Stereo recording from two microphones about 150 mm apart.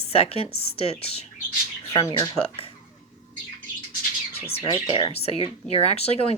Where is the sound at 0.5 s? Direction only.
90° left.